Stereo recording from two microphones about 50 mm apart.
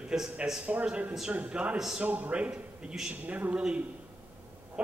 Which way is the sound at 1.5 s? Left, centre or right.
Right.